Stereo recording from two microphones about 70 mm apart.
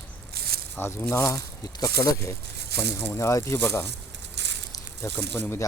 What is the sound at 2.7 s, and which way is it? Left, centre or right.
Speech, left.